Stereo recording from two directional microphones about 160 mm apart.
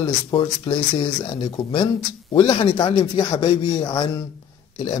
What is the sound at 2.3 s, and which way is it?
A man's voice, 30° left (ahead or behind).